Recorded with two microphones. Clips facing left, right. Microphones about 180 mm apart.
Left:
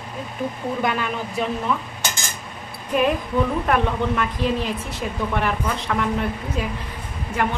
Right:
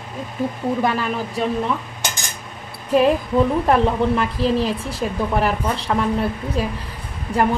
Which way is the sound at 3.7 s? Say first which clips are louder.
Right 4 dB; 30° right (ahead or behind).